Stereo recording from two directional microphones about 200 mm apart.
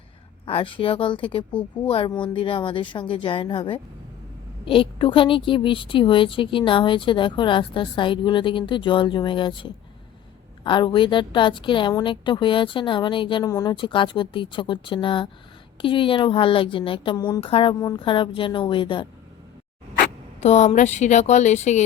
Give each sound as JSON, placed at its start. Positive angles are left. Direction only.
{"t": 0.4, "sound": "a woman's voice", "side_deg": 25}
{"t": 20.4, "sound": "a woman's voice", "side_deg": 35}